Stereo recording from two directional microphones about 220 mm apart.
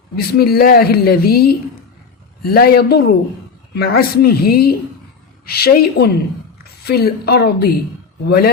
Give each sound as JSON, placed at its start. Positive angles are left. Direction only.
{"t": 0.2, "sound": "a man's voice", "side_deg": 45}